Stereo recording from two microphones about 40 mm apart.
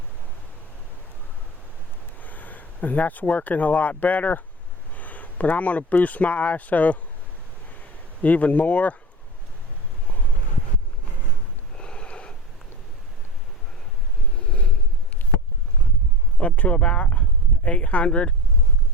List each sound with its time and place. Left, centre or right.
2.2 s speech: left
8.2 s speech: left
11.8 s sniff: left
14.3 s a sound: left
16.4 s speech: left